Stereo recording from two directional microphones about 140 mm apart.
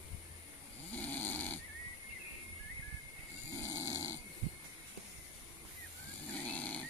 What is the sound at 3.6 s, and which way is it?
Snoring, 25° left (ahead or behind).